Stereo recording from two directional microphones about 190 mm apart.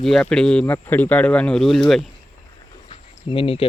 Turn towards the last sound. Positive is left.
turn(degrees=30)  # may be behind; listen again after turning